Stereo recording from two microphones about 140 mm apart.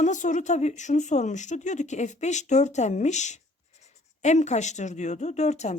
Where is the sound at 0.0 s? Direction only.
60° left (ahead or behind).